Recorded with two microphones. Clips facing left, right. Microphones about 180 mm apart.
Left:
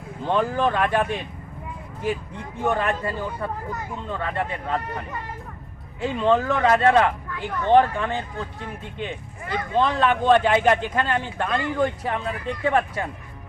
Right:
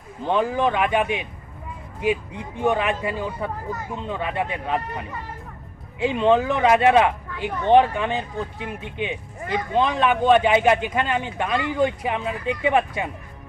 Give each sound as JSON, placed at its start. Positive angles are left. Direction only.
{"t": 0.3, "sound": "speech", "side_deg": -5}
{"t": 6.1, "sound": "speech", "side_deg": -20}